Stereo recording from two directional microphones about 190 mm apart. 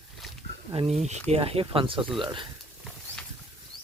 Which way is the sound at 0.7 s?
30° right (ahead or behind).